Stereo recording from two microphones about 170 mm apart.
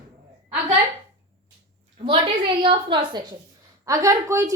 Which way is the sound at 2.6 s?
25° right (ahead or behind).